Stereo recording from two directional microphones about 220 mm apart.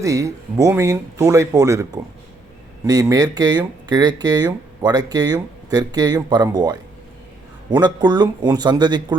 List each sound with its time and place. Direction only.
0.0 s a man's voice: 15° right (ahead or behind)